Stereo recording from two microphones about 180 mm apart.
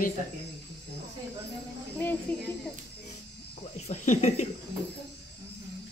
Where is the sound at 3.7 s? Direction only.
40° left (ahead or behind).